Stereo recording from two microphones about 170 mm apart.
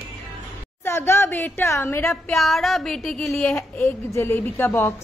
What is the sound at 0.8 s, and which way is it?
A woman's voice, 15° left (ahead or behind).